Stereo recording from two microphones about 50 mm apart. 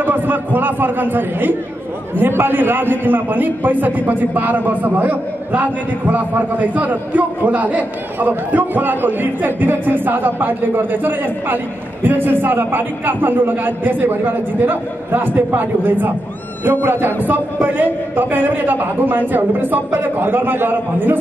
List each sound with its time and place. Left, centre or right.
0.0 s a man's voice: right